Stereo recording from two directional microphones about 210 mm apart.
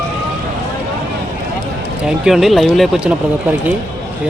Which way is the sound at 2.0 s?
Centre (ahead or behind).